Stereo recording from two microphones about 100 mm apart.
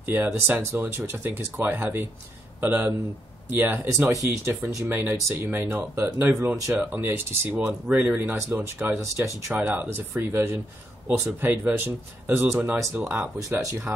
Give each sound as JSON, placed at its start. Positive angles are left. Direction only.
{"t": 0.1, "sound": "speech", "side_deg": -20}
{"t": 13.4, "sound": "speech", "side_deg": -35}